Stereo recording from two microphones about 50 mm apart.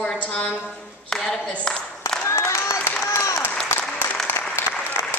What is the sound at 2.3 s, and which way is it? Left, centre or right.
Applause, left.